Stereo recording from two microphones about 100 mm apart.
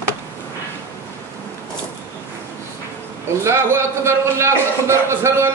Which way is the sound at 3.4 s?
25° right (ahead or behind).